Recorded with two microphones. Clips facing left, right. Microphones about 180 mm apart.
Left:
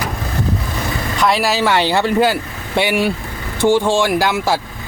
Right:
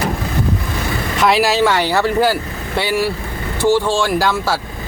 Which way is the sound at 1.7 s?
20° left (ahead or behind).